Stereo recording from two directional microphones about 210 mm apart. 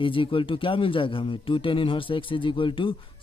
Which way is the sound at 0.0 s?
25° left (ahead or behind).